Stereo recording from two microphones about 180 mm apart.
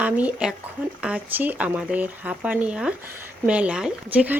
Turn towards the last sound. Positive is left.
turn(degrees=-10)  # may be behind; listen again after turning